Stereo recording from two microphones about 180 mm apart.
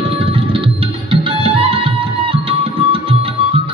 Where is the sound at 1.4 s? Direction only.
30° right (ahead or behind).